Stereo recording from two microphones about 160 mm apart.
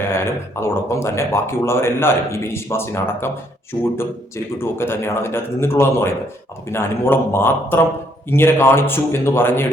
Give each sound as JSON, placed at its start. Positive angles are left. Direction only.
{"t": 0.0, "sound": "speech", "side_deg": 15}
{"t": 4.5, "sound": "speech", "side_deg": 15}